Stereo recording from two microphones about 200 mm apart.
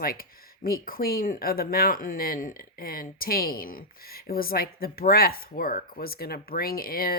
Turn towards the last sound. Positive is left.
turn(degrees=50)  # may be behind; listen again after turning